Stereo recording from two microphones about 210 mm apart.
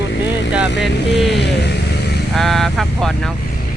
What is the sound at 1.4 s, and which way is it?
Vehicle, 50° left (ahead or behind).